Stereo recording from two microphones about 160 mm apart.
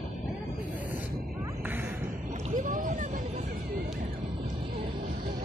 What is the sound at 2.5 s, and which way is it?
Speech, 55° right (ahead or behind).